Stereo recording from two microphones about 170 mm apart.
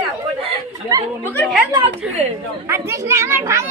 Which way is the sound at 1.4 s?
Centre (ahead or behind).